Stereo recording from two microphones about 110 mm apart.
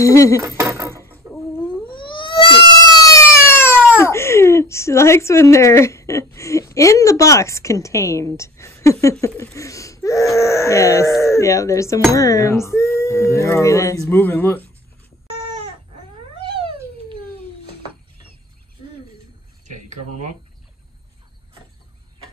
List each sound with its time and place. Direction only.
0.0 s speech: 30° left (ahead or behind)
0.4 s dishes: 25° right (ahead or behind)
2.0 s a sound: 50° left (ahead or behind)
2.7 s speech: 35° left (ahead or behind); by 14.7 s 20° left (ahead or behind)
16.5 s cat: 55° right (ahead or behind)
19.9 s speech: 90° right